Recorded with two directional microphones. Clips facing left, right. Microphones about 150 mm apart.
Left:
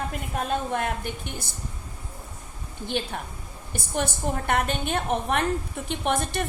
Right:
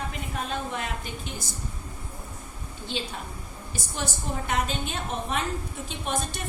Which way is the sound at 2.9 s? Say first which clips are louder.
Left 4 dB; 60° left (ahead or behind).